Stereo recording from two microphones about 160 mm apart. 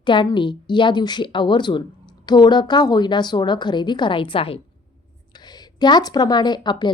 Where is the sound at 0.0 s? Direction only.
30° left (ahead or behind).